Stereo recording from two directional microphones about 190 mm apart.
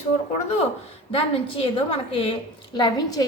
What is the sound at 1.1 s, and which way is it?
A woman's voice, 30° left (ahead or behind).